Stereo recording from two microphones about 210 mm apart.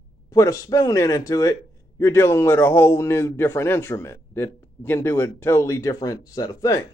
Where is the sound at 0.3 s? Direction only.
15° left (ahead or behind).